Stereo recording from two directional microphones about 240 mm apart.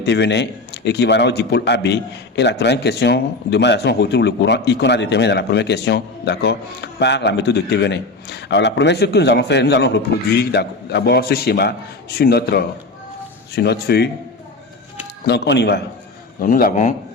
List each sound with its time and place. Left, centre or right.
0.0 s a man's voice: left
15.3 s a man's voice: left